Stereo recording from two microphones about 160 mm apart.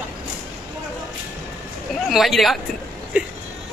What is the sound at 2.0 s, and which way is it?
Speech, centre (ahead or behind).